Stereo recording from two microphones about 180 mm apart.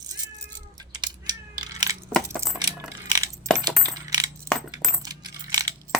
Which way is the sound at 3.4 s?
15° right (ahead or behind).